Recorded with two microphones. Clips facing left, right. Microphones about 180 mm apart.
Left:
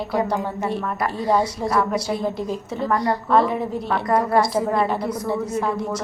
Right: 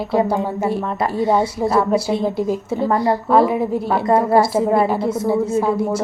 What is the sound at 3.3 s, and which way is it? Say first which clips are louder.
Speech: right 3 dB; 5° right (ahead or behind).